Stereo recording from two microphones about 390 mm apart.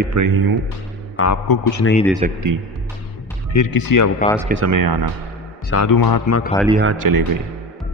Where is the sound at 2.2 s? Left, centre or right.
Centre.